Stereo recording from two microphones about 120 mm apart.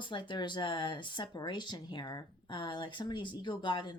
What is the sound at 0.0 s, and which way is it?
Speech, 40° left (ahead or behind).